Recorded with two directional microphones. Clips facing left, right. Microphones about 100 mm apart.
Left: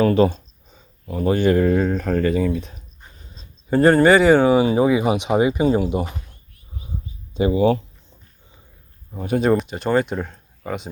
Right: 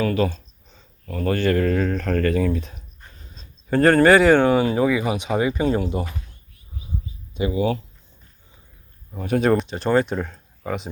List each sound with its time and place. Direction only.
0.0 s speech: 30° left (ahead or behind)
0.7 s speech: 15° left (ahead or behind)
7.3 s speech: 30° left (ahead or behind)
9.1 s speech: 5° left (ahead or behind)